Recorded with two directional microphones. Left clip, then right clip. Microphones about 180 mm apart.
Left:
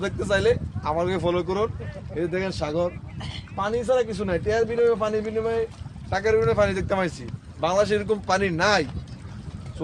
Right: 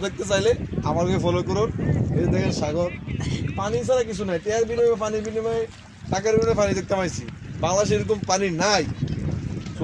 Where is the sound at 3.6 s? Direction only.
30° right (ahead or behind).